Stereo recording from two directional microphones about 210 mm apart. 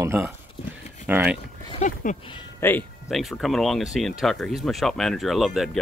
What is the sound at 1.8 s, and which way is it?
Speech, 35° left (ahead or behind).